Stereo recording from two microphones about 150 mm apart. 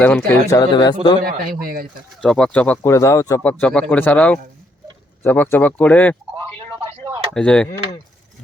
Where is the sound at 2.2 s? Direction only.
5° left (ahead or behind).